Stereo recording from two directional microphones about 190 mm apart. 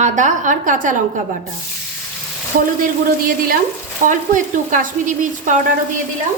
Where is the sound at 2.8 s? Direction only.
50° right (ahead or behind).